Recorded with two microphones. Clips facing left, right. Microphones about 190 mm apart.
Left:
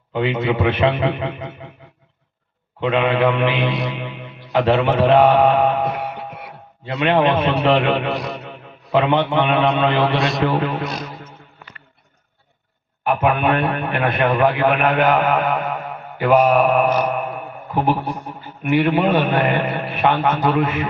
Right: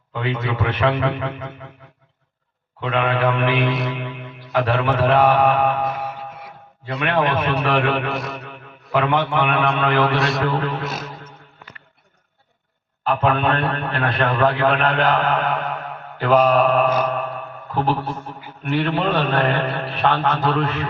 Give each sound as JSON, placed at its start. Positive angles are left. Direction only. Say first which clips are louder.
{"t": 0.1, "sound": "a man's voice", "louder": "left 5 dB", "side_deg": 20}
{"t": 2.8, "sound": "a man's voice", "louder": "left 3 dB", "side_deg": 20}
{"t": 5.9, "sound": "music", "louder": "left 2 dB", "side_deg": 65}
{"t": 6.8, "sound": "a man's voice", "louder": "left 4 dB", "side_deg": 20}
{"t": 13.1, "sound": "a man's voice", "louder": "left 2 dB", "side_deg": 15}